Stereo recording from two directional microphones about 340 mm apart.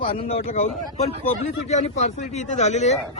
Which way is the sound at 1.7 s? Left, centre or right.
Centre.